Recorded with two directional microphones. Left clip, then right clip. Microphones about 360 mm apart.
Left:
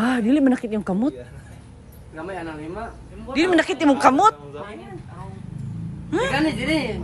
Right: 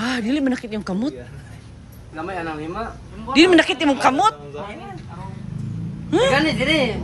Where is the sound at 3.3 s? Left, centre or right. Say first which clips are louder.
Right 5 dB; centre.